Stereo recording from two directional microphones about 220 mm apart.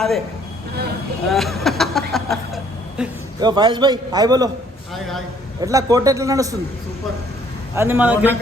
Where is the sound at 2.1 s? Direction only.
Centre (ahead or behind).